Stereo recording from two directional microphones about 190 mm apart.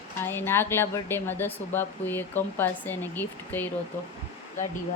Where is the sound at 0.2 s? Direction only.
10° left (ahead or behind).